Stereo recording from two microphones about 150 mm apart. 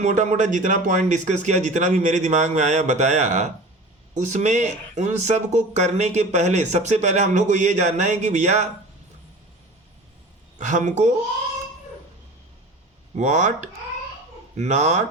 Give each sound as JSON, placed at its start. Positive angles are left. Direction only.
{"t": 0.0, "sound": "speech", "side_deg": -50}
{"t": 10.6, "sound": "speech", "side_deg": -55}
{"t": 13.1, "sound": "speech", "side_deg": -55}